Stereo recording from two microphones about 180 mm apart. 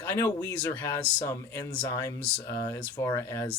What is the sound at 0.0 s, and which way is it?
Speech, 15° left (ahead or behind).